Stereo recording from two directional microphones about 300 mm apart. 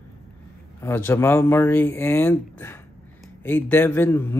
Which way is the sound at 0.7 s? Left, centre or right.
Centre.